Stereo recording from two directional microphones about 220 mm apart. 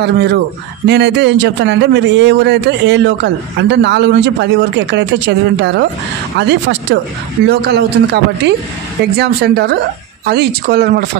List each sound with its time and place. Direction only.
0.0 s speech: 50° right (ahead or behind)